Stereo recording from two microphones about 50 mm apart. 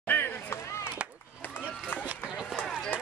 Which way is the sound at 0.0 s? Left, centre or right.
Left.